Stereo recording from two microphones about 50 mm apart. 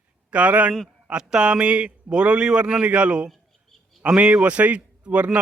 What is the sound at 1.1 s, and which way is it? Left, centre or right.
A man's voice, centre.